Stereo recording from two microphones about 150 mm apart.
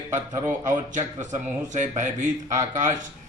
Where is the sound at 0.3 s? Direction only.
20° right (ahead or behind).